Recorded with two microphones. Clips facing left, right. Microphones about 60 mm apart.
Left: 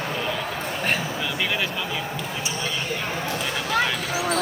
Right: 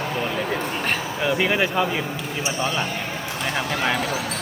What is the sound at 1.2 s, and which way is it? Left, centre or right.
Speech, right.